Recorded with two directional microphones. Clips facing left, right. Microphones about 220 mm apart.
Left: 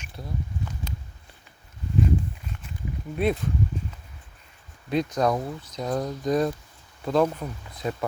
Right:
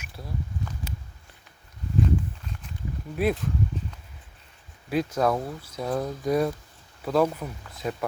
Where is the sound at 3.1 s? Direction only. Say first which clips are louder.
Even; 5° right (ahead or behind).